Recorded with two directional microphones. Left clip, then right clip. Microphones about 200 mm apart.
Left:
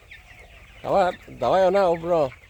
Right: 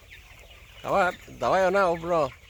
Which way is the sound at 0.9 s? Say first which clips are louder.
Left 3 dB; 15° left (ahead or behind).